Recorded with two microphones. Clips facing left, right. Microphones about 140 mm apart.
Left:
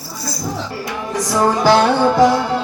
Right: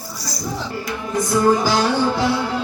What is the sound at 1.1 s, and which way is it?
Music, 85° left.